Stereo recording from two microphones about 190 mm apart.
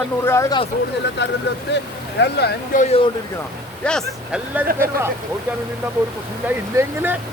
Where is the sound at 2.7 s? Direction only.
40° left (ahead or behind).